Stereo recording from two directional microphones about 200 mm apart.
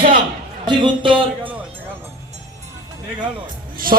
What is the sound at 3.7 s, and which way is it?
Speech, 45° right (ahead or behind).